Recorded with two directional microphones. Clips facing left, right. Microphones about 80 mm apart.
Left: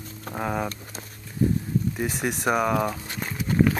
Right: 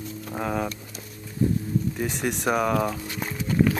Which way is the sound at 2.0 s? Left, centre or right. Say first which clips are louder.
Even; centre.